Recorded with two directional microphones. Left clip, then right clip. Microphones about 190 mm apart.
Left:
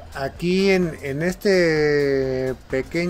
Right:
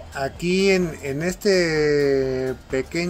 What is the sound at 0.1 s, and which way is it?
A man's voice, 15° left (ahead or behind).